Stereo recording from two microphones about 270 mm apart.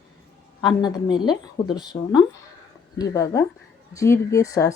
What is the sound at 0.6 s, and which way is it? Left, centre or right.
Speech, centre.